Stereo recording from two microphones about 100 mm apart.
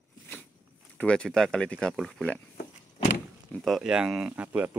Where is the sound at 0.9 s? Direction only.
10° left (ahead or behind).